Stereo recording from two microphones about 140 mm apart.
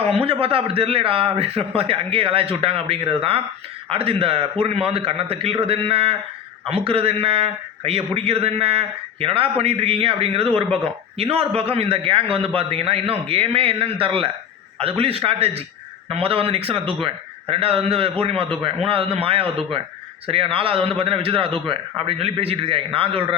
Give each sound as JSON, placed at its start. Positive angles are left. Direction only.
{"t": 0.0, "sound": "a man's voice", "side_deg": -45}